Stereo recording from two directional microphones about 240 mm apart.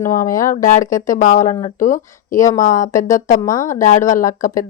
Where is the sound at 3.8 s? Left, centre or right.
Left.